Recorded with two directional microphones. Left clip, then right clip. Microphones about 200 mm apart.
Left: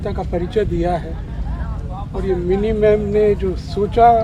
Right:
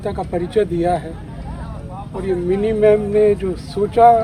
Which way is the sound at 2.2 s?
5° right (ahead or behind).